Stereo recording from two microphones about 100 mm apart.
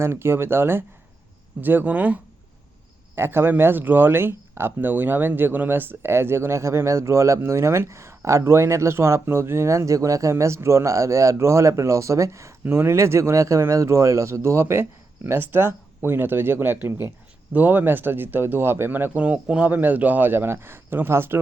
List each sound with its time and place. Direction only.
0.0 s speech: 25° right (ahead or behind)